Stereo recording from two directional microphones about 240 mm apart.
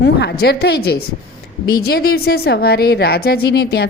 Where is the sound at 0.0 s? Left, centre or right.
Left.